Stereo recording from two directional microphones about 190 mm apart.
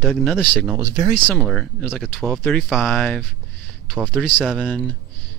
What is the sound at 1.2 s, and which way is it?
Speech, centre (ahead or behind).